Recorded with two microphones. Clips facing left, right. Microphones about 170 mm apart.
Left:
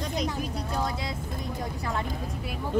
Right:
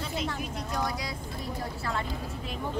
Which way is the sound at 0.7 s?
25° left (ahead or behind).